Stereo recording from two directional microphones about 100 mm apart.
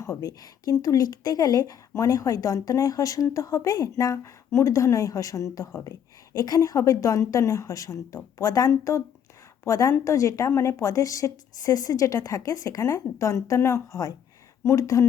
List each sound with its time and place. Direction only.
0.0 s a woman's voice: 35° left (ahead or behind)